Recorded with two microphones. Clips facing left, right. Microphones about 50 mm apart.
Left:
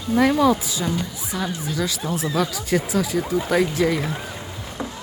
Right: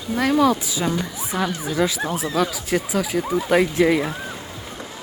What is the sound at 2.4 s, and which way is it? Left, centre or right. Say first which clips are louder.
Speech: right 1 dB; centre.